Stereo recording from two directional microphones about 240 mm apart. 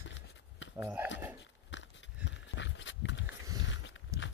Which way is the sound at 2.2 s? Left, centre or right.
Left.